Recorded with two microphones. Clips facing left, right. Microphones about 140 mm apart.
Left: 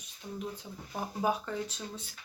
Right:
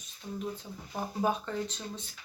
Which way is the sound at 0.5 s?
10° left (ahead or behind).